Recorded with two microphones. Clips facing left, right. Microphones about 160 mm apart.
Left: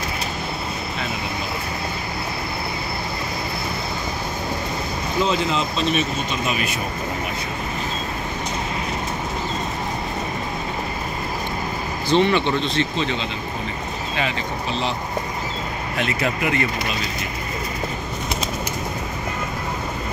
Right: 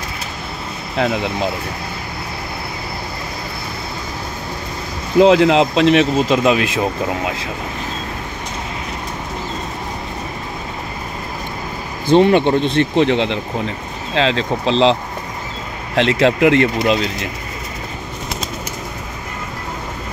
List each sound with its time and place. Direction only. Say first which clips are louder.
0.9 s speech: right 9 dB; 80° right
5.2 s speech: right 12 dB; 90° right
12.1 s speech: right 7 dB; 50° right (ahead or behind); by 13.4 s 75° right (ahead or behind)
14.1 s speech: right 10 dB; 90° right
16.0 s speech: right 11 dB; 90° right